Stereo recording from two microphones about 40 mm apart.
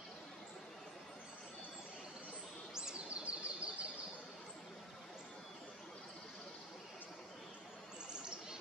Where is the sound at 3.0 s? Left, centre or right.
Right.